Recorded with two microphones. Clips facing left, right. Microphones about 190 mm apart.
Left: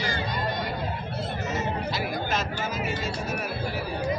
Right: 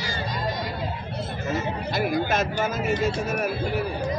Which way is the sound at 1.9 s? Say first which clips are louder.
Right 5 dB; 50° right (ahead or behind).